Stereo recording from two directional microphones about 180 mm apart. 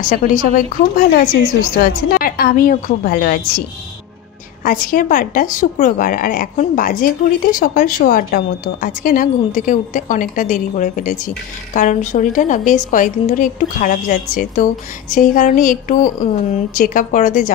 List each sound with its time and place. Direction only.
0.0 s a woman's voice: 50° left (ahead or behind)
4.6 s a woman's voice: 50° left (ahead or behind)